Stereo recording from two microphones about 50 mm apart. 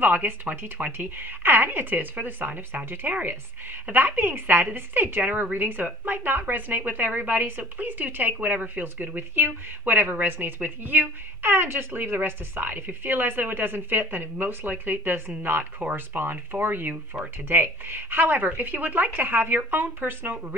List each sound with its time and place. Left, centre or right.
0.0 s a woman's voice: right
15.8 s speech: right
16.2 s a woman's voice: right